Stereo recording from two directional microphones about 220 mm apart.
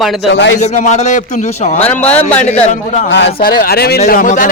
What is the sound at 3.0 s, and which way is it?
A man's voice, 50° left (ahead or behind).